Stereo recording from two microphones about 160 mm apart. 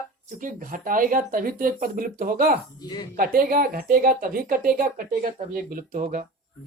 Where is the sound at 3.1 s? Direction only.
65° right (ahead or behind).